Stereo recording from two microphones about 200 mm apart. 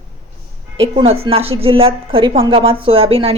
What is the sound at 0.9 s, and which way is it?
A woman's voice, 25° right (ahead or behind).